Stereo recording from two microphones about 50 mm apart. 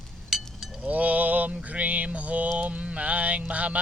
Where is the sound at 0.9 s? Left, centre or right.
Right.